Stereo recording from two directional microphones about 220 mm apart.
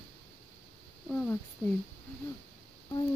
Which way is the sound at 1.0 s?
10° left (ahead or behind).